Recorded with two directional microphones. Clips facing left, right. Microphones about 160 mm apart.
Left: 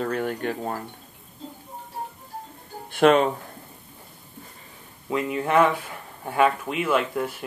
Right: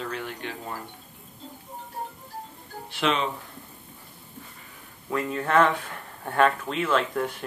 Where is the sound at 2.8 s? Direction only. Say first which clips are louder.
Left 9 dB; 50° left (ahead or behind).